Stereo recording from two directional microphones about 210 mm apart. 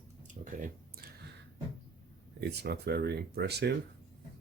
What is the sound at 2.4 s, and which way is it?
Speech, 50° right (ahead or behind).